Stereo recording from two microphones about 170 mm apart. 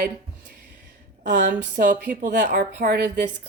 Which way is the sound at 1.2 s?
90° right.